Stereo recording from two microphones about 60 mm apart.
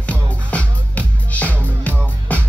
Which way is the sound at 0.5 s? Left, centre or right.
Left.